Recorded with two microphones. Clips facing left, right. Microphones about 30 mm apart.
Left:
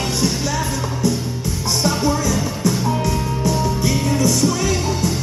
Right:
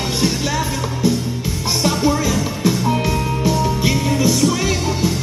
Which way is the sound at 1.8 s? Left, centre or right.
Centre.